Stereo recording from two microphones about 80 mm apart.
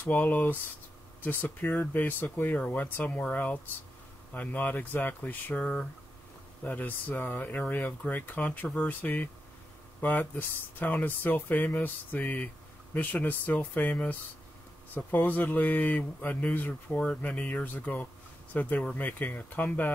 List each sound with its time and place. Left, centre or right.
0.1 s speech: left